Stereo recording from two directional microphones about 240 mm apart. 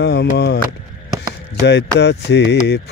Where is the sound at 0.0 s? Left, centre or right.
Left.